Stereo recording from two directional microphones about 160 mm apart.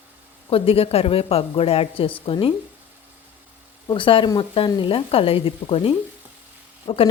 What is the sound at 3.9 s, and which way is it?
A woman's voice, 30° left (ahead or behind).